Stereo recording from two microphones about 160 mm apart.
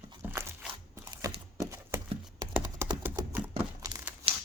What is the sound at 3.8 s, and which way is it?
Tearing, 25° right (ahead or behind).